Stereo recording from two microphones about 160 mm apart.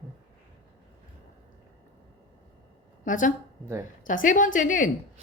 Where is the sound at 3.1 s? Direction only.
55° left (ahead or behind).